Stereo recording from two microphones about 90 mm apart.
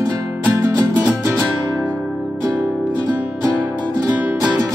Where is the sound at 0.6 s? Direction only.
30° right (ahead or behind).